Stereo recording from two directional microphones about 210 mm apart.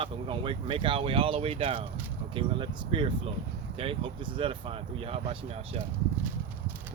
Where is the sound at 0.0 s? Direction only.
25° right (ahead or behind).